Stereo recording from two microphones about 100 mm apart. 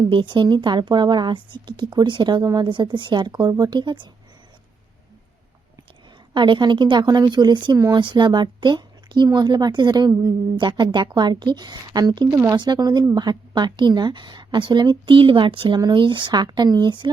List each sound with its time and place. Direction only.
0.1 s speech: 55° right (ahead or behind)
6.3 s speech: 50° right (ahead or behind)